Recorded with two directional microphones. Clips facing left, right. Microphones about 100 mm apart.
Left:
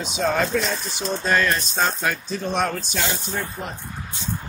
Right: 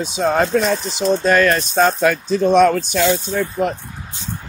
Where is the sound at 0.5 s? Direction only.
55° right (ahead or behind).